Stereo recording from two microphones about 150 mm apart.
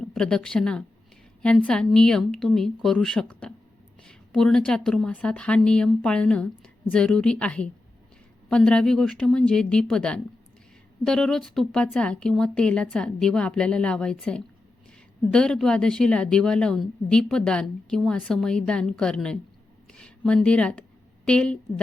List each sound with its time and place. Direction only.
0.0 s a woman's voice: 5° left (ahead or behind)